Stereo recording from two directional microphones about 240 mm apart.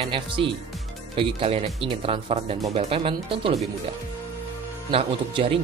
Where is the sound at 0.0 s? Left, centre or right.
Right.